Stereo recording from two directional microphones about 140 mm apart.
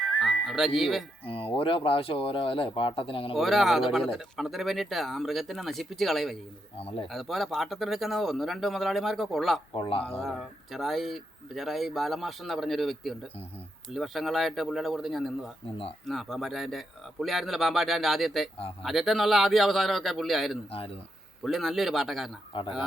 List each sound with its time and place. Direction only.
0.0 s music: 5° left (ahead or behind)
0.4 s speech: centre (ahead or behind)
1.2 s speech: 40° left (ahead or behind)
3.3 s speech: centre (ahead or behind)
6.7 s a man's voice: 45° left (ahead or behind)
7.1 s speech: centre (ahead or behind)
9.7 s speech: 40° left (ahead or behind)
10.2 s speech: centre (ahead or behind)
22.5 s speech: 35° left (ahead or behind)